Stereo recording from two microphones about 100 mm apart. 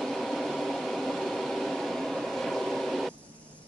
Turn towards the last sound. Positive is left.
turn(degrees=0)  # may be behind; listen again after turning